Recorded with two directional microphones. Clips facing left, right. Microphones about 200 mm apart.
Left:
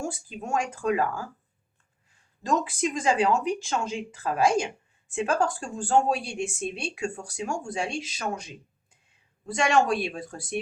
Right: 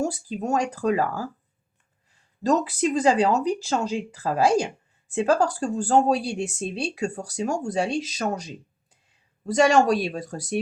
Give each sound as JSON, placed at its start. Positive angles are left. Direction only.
{"t": 0.0, "sound": "speech", "side_deg": -40}
{"t": 2.4, "sound": "speech", "side_deg": -35}